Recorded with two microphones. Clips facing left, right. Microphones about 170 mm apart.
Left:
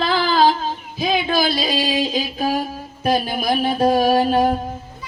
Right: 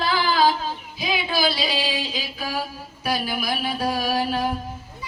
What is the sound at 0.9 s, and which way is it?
Speech, 50° left (ahead or behind).